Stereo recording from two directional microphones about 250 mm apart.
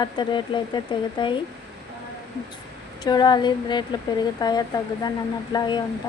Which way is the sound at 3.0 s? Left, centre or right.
Centre.